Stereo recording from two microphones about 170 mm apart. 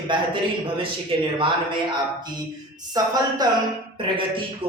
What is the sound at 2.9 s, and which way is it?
Speech, 25° right (ahead or behind).